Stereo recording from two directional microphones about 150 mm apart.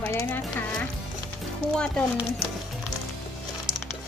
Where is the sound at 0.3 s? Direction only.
10° left (ahead or behind).